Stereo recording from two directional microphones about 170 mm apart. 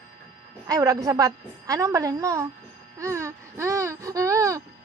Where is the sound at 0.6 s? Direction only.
20° right (ahead or behind).